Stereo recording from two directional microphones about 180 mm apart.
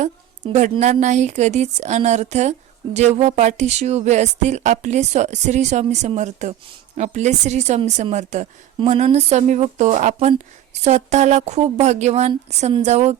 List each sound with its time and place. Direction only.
0.5 s speech: 40° right (ahead or behind)